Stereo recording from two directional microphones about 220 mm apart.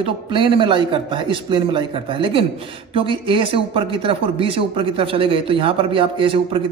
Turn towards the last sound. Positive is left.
turn(degrees=-25)  # may be behind; listen again after turning